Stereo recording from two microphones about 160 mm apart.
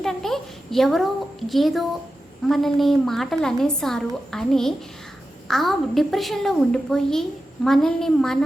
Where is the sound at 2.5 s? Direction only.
Centre (ahead or behind).